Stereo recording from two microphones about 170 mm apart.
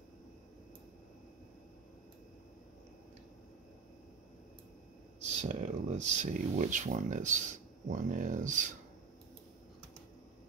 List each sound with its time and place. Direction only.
5.3 s speech: 45° right (ahead or behind)